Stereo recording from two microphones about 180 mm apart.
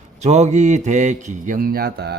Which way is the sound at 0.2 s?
40° right (ahead or behind).